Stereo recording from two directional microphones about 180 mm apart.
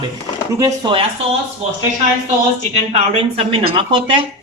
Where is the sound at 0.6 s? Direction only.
25° right (ahead or behind).